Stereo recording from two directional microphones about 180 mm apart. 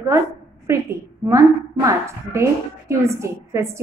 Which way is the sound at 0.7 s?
15° right (ahead or behind).